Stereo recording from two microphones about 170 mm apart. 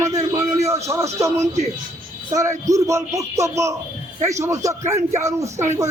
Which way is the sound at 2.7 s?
20° right (ahead or behind).